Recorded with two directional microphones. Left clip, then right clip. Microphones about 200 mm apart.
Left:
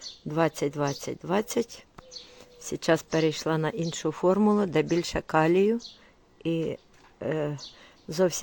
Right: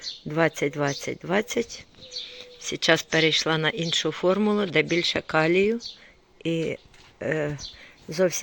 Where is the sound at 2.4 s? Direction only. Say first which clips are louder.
Right 5 dB; 20° left (ahead or behind).